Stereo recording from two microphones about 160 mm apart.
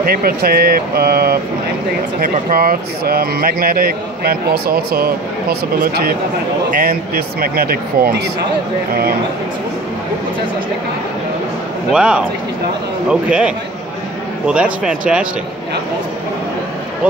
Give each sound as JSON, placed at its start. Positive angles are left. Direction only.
{"t": 0.0, "sound": "speech", "side_deg": -65}
{"t": 11.9, "sound": "speech", "side_deg": -5}